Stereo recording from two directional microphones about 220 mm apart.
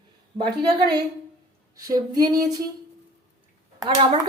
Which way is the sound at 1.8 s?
15° right (ahead or behind).